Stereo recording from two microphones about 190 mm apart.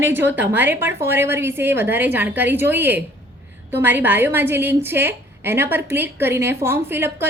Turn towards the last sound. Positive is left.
turn(degrees=-10)  # may be behind; listen again after turning